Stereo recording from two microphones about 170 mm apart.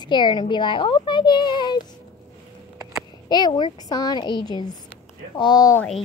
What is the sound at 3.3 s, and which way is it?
A woman's voice, 25° left (ahead or behind).